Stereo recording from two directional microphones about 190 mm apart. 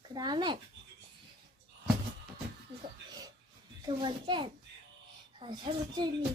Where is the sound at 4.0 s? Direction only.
25° right (ahead or behind).